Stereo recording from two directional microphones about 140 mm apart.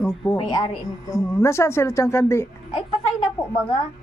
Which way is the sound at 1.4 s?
20° left (ahead or behind).